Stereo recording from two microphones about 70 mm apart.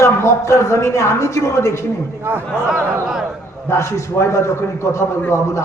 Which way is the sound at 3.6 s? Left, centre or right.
Left.